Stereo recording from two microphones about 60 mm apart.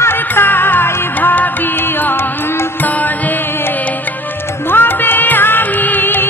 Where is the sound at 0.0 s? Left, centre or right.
Left.